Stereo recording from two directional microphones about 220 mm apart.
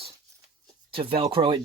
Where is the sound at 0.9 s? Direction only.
25° right (ahead or behind).